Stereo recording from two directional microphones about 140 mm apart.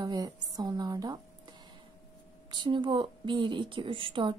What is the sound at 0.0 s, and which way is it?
A woman's voice, 30° right (ahead or behind).